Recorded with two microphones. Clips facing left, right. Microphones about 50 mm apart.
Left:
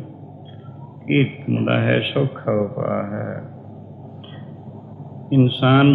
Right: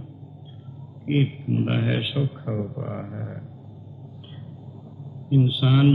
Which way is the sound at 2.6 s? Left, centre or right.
Left.